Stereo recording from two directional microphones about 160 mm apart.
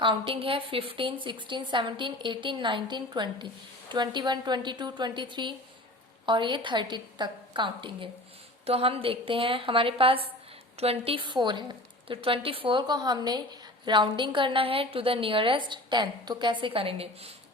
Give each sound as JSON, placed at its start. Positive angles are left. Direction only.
{"t": 0.0, "sound": "a woman's voice", "side_deg": -35}